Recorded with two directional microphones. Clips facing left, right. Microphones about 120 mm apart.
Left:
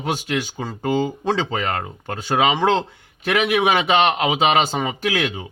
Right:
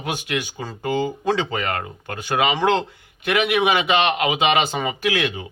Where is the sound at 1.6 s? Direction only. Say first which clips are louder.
Left 1 dB; 30° left (ahead or behind).